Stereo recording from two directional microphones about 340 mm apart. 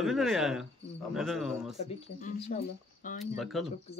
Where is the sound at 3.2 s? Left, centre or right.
Centre.